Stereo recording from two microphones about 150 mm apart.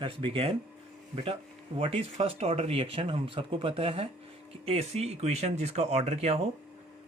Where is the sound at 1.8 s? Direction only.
40° right (ahead or behind).